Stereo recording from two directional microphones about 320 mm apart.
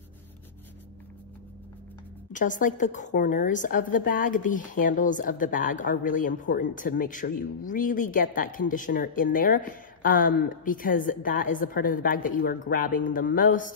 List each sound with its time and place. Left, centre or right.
2.3 s a woman's voice: left